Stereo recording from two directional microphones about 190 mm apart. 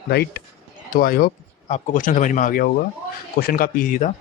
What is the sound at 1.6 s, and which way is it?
Speech, 40° left (ahead or behind).